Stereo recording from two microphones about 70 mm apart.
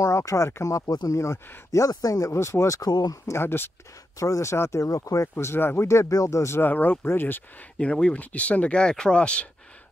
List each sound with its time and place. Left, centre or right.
0.0 s speech: left
2.3 s speech: left
2.8 s speech: left
3.3 s speech: left
4.2 s speech: left
5.3 s speech: left
5.9 s speech: left
6.6 s speech: left
7.8 s speech: centre